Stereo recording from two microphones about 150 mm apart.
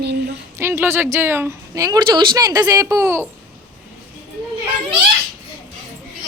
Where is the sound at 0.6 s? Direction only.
15° right (ahead or behind).